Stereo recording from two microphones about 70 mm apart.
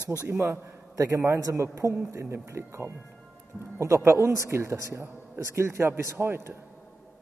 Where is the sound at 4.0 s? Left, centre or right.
Right.